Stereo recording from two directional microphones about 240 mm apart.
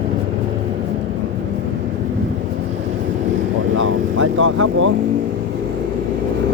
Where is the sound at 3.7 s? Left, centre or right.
Right.